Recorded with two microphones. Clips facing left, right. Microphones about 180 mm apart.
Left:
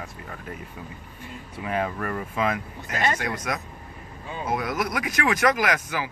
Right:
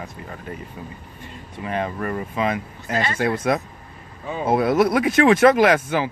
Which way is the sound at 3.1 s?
30° right (ahead or behind).